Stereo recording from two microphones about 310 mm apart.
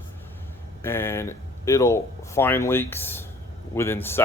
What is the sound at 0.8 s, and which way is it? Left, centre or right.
Speech, centre.